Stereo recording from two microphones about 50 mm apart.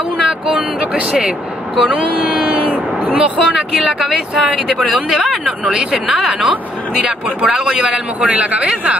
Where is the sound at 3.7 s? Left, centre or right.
Centre.